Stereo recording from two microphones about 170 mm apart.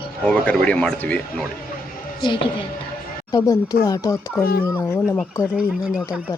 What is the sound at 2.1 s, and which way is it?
A woman's voice, 25° left (ahead or behind).